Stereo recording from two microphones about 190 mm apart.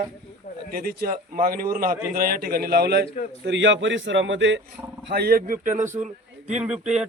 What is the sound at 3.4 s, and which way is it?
A man's voice, 70° right (ahead or behind).